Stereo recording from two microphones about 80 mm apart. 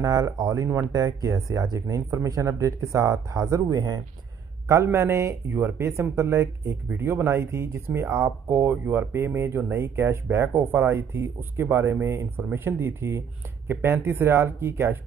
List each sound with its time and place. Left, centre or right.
0.0 s speech: right
0.7 s speech: right